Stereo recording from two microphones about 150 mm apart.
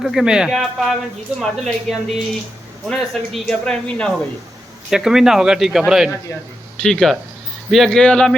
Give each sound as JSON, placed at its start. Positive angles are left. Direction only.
{"t": 0.0, "sound": "a man's voice", "side_deg": 0}